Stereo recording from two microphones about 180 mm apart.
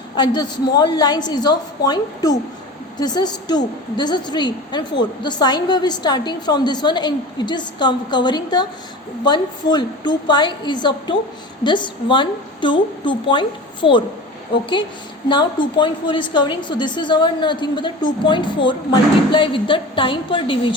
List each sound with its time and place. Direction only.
0.2 s a woman's voice: 25° left (ahead or behind)